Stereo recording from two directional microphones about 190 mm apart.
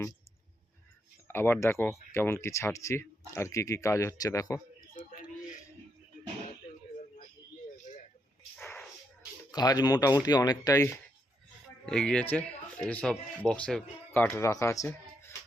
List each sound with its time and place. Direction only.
1.3 s speech: 10° left (ahead or behind)
8.5 s a sound: 5° left (ahead or behind)
9.5 s speech: 20° left (ahead or behind)
11.9 s speech: 5° left (ahead or behind)